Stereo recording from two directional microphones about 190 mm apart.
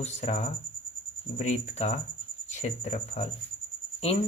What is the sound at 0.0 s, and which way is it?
Speech, 35° left (ahead or behind).